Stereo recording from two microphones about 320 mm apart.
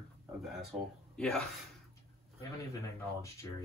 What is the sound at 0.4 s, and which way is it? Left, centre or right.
Speech, centre.